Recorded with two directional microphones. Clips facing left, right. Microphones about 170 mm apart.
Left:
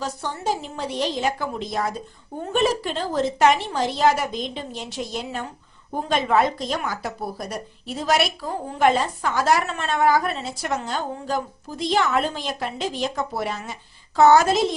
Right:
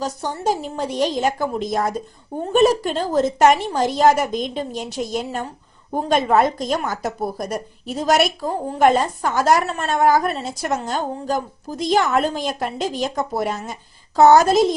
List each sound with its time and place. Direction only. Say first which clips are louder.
0.0 s a woman's voice: right 4 dB; 40° right (ahead or behind)